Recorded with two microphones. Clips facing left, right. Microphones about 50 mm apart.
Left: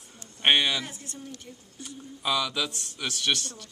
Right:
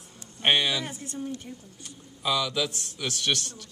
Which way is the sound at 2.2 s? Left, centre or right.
Centre.